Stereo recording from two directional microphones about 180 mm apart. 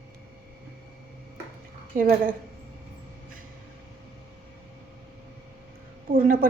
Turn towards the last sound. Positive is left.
turn(degrees=-50)  # may be behind; listen again after turning